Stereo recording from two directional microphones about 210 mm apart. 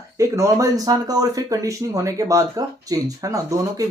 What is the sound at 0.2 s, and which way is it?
Speech, 15° right (ahead or behind).